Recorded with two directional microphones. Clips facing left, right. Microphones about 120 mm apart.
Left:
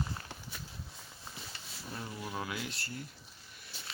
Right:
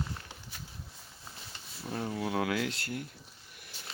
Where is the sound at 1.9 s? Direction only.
50° right (ahead or behind).